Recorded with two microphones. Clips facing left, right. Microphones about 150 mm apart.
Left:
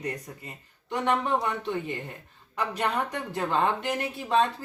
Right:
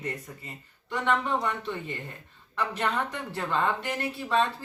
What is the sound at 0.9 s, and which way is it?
A woman's voice, 20° left (ahead or behind).